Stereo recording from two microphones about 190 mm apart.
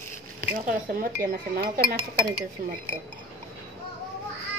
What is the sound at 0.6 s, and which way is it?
A woman's voice, 45° right (ahead or behind).